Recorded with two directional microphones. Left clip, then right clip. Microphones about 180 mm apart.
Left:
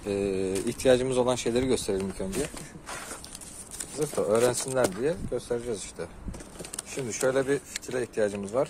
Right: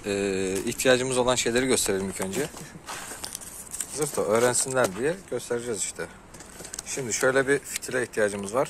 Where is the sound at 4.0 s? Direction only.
Centre (ahead or behind).